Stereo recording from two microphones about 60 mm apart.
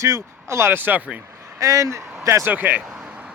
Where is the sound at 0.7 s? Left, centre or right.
Right.